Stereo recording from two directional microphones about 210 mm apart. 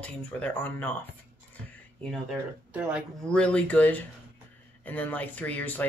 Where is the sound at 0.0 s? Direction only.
5° left (ahead or behind).